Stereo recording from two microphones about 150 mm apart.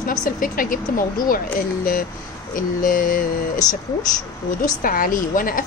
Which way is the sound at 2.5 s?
65° left (ahead or behind).